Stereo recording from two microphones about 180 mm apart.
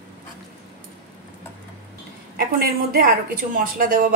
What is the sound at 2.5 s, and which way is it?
A woman's voice, 55° right (ahead or behind).